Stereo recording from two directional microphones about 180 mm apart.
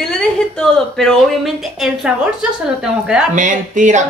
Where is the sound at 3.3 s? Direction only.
45° right (ahead or behind).